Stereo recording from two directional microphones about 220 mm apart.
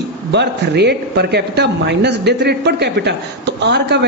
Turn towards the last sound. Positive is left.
turn(degrees=-50)  # may be behind; listen again after turning